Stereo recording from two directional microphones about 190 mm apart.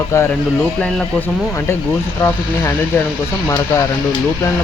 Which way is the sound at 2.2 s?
10° left (ahead or behind).